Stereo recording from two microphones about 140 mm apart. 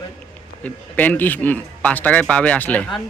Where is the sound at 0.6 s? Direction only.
10° left (ahead or behind).